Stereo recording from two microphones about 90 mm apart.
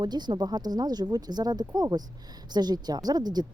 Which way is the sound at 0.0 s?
55° right (ahead or behind).